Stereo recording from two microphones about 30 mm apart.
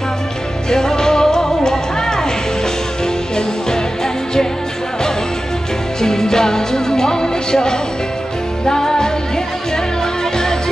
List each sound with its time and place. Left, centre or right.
0.7 s music: left
3.3 s music: centre
5.9 s music: centre